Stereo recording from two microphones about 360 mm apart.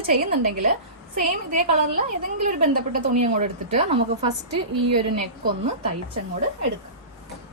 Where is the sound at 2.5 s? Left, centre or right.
Right.